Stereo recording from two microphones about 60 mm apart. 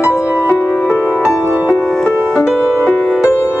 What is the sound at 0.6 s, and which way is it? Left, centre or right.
Music, left.